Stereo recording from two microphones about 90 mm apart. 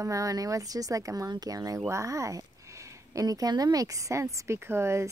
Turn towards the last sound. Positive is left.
turn(degrees=-30)  # may be behind; listen again after turning